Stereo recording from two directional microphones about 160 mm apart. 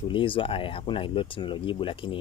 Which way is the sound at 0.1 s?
30° left (ahead or behind).